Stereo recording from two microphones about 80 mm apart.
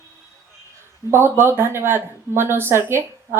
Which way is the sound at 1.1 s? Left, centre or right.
Right.